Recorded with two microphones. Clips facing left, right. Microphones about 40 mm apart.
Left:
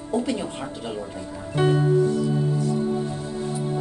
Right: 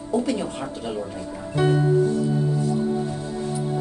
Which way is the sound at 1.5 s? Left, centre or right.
Left.